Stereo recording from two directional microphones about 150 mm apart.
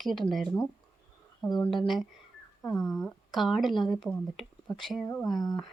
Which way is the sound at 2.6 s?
20° left (ahead or behind).